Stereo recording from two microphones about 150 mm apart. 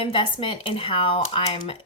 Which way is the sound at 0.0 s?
35° left (ahead or behind).